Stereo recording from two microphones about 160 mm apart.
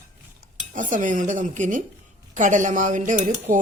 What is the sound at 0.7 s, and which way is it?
Speech, 55° right (ahead or behind).